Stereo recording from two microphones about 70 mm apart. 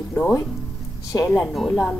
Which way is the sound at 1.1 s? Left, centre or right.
Left.